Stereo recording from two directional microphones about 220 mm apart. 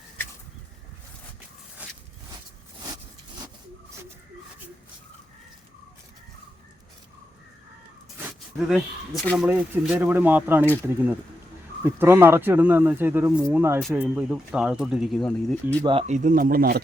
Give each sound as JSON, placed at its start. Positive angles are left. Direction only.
{"t": 1.8, "sound": "a sound", "side_deg": -5}
{"t": 8.5, "sound": "speech", "side_deg": 0}
{"t": 15.8, "sound": "speech", "side_deg": -25}